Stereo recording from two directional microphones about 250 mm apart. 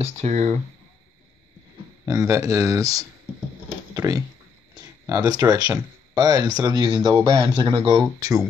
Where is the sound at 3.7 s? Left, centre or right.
Centre.